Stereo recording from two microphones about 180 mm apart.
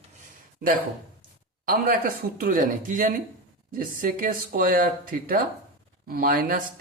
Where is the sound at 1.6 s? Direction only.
50° right (ahead or behind).